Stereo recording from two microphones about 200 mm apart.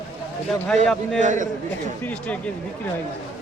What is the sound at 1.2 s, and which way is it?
Speech, 40° right (ahead or behind).